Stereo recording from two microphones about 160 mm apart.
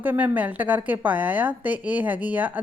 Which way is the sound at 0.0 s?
10° right (ahead or behind).